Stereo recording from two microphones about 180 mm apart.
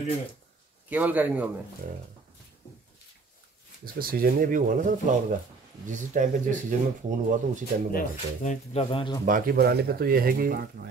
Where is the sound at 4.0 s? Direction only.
55° right (ahead or behind).